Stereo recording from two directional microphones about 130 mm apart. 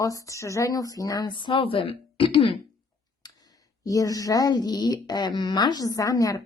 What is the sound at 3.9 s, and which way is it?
A woman's voice, 25° left (ahead or behind).